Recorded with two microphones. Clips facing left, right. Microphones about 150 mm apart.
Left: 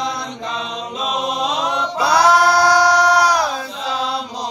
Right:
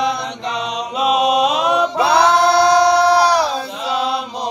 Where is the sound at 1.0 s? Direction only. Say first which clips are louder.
Right 8 dB; 70° right (ahead or behind).